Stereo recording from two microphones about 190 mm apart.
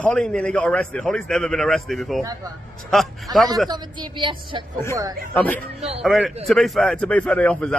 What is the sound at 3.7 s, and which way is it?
Speech, 25° right (ahead or behind).